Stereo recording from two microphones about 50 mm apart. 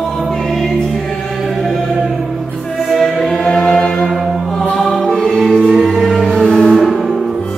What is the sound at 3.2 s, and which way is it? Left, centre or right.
Choir, centre.